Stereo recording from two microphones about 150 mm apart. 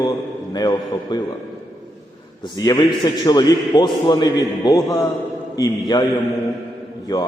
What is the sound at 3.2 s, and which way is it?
A man's voice, 30° left (ahead or behind).